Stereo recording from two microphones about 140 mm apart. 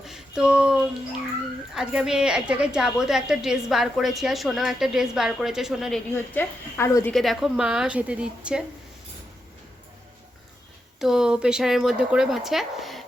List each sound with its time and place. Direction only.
0.0 s a sound: 5° right (ahead or behind)
1.7 s a woman's voice: 5° right (ahead or behind)
6.1 s a woman's voice: 15° left (ahead or behind)
7.1 s a woman's voice: centre (ahead or behind)
11.0 s a woman's voice: 5° right (ahead or behind)